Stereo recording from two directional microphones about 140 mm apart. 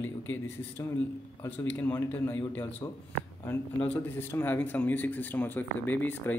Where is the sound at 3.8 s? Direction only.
15° left (ahead or behind).